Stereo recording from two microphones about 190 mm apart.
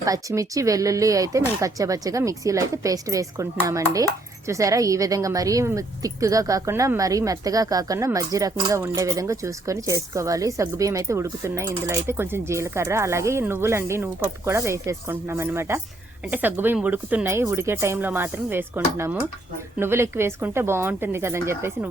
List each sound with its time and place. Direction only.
0.0 s speech: 15° right (ahead or behind)